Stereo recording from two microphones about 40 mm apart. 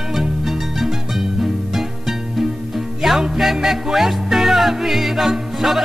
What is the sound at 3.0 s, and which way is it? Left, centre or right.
Music, centre.